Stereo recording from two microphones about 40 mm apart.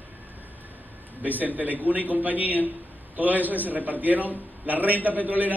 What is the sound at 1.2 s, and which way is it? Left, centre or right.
A man's voice, right.